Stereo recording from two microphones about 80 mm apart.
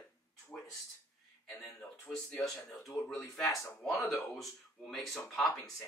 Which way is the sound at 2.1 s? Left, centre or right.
Centre.